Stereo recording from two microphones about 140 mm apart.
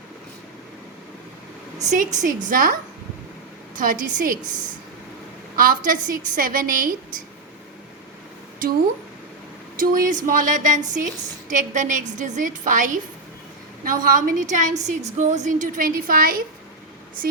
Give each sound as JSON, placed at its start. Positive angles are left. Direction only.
{"t": 1.8, "sound": "a woman's voice", "side_deg": -60}
{"t": 2.2, "sound": "a woman's voice", "side_deg": -75}
{"t": 3.8, "sound": "a woman's voice", "side_deg": -75}
{"t": 5.5, "sound": "a woman's voice", "side_deg": -85}
{"t": 9.7, "sound": "a woman's voice", "side_deg": -80}
{"t": 13.8, "sound": "a woman's voice", "side_deg": -80}